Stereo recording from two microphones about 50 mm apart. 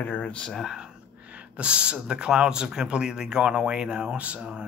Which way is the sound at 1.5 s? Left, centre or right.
Right.